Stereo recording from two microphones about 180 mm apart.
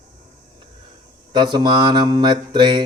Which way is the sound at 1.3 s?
25° right (ahead or behind).